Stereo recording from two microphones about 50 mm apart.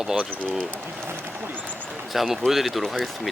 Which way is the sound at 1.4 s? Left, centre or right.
Right.